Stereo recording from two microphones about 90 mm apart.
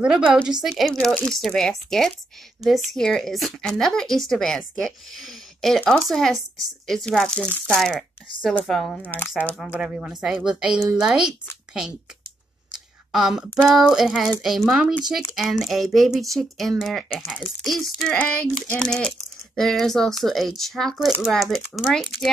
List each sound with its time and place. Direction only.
0.0 s a woman's voice: 10° right (ahead or behind)
12.7 s speech: 5° right (ahead or behind)
17.2 s speech: 20° left (ahead or behind)
17.6 s speech: centre (ahead or behind)
18.1 s speech: 15° left (ahead or behind); by 22.3 s centre (ahead or behind)